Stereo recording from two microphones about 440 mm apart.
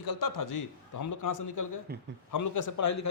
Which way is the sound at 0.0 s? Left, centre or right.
Left.